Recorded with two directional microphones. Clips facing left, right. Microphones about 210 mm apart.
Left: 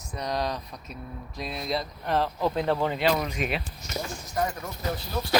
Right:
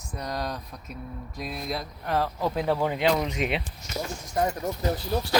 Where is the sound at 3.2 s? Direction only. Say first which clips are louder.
Right 2 dB; 20° right (ahead or behind).